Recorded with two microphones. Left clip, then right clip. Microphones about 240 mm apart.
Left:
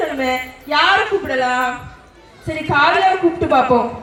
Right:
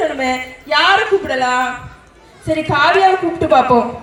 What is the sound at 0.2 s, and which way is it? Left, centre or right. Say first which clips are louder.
A woman's voice: right 1 dB; right.